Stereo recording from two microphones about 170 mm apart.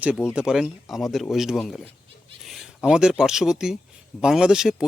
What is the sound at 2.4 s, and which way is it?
Bleat, centre (ahead or behind).